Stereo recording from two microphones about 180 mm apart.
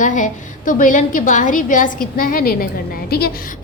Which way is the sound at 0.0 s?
45° left (ahead or behind).